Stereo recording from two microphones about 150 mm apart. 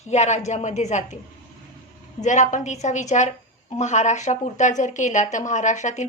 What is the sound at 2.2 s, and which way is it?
A woman's voice, 55° left (ahead or behind).